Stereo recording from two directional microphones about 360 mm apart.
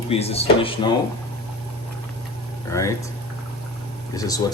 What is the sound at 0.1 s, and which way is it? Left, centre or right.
Speech, centre.